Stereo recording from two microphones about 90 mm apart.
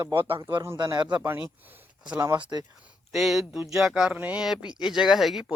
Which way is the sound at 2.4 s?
50° right (ahead or behind).